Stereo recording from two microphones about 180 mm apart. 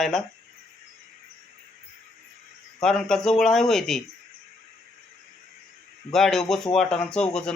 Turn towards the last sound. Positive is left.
turn(degrees=5)  # may be behind; listen again after turning